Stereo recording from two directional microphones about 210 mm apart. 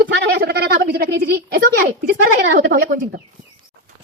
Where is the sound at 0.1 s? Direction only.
50° right (ahead or behind).